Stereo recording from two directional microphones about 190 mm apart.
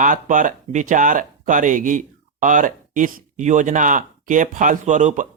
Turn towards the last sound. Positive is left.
turn(degrees=-40)  # may be behind; listen again after turning